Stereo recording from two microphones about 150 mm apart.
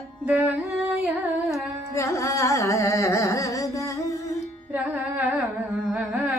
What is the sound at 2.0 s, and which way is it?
Carnatic music, 20° left (ahead or behind).